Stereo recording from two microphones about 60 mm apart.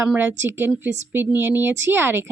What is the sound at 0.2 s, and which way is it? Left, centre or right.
Speech, right.